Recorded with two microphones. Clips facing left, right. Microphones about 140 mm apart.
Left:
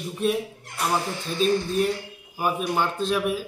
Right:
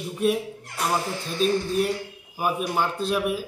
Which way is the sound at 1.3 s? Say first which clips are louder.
Even; 5° right (ahead or behind).